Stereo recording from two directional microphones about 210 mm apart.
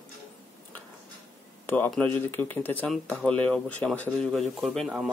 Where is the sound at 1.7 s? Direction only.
5° left (ahead or behind).